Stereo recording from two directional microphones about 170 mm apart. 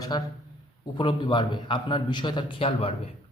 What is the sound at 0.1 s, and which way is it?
A man's voice, 25° left (ahead or behind).